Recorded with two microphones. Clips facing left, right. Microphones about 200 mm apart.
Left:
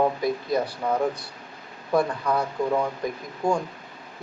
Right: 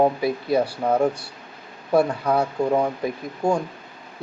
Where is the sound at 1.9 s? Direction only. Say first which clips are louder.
Right 4 dB; 25° right (ahead or behind).